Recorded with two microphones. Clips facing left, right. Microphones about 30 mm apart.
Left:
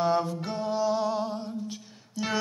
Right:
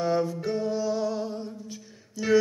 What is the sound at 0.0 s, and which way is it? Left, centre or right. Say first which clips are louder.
Music: even; left.